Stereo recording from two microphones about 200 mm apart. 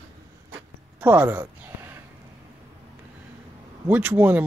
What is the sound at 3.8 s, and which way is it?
Speech, 10° right (ahead or behind).